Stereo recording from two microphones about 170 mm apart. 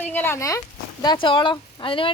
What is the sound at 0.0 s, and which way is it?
Speech, 10° left (ahead or behind).